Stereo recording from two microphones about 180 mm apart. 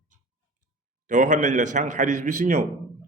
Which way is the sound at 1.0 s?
45° right (ahead or behind).